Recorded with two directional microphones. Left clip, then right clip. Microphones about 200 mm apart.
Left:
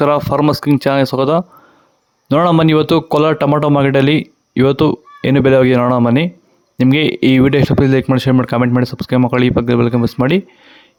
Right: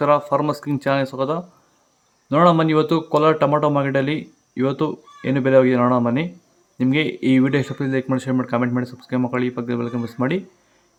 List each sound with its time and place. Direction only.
0.0 s speech: 45° left (ahead or behind)